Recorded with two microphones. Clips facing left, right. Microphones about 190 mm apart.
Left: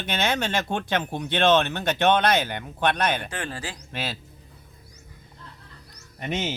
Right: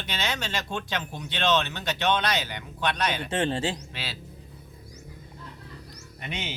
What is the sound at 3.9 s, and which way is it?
Speech, 50° left (ahead or behind).